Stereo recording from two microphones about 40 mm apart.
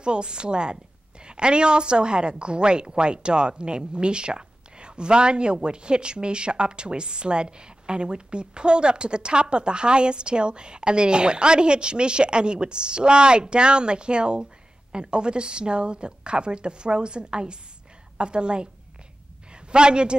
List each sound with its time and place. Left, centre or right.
0.0 s a woman's voice: right